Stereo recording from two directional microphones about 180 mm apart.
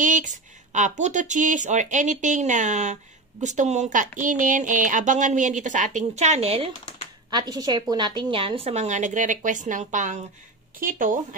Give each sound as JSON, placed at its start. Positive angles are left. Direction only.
{"t": 0.0, "sound": "speech", "side_deg": -45}
{"t": 7.2, "sound": "a woman's voice", "side_deg": -25}